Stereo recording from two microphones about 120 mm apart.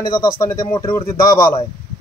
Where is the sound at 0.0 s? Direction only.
35° left (ahead or behind).